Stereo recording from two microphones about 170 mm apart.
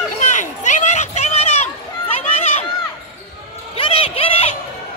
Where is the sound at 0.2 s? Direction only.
45° left (ahead or behind).